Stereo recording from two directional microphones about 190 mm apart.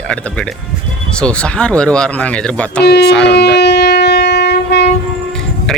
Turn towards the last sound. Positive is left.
turn(degrees=0)  # may be behind; listen again after turning